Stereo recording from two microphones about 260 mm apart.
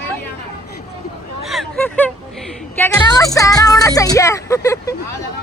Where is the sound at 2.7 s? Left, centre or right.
Centre.